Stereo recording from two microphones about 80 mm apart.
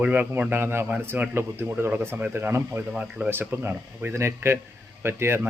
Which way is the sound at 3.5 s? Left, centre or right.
Right.